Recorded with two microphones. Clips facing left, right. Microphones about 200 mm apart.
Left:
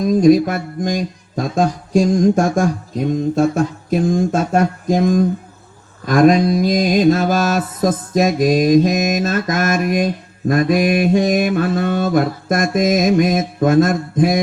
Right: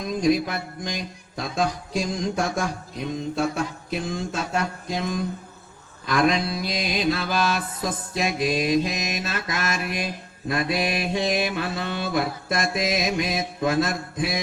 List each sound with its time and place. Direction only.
0.0 s music: 45° left (ahead or behind)